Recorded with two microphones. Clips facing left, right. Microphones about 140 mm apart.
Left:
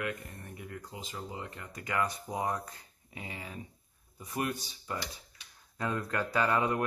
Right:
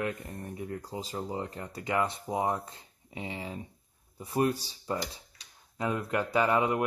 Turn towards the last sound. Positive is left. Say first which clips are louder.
# right 3 dB
turn(degrees=-20)  # may be behind; listen again after turning